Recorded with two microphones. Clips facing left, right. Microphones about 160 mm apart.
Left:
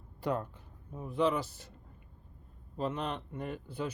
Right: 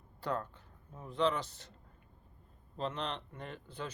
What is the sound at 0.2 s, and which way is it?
Speech, 15° left (ahead or behind).